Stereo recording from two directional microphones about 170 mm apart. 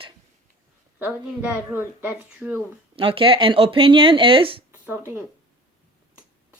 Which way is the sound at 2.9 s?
30° right (ahead or behind).